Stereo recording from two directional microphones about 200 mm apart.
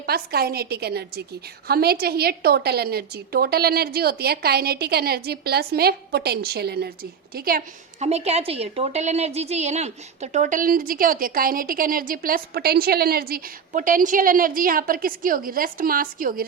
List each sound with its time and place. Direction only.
0.0 s a woman's voice: 50° right (ahead or behind)
8.0 s a woman's voice: 35° right (ahead or behind)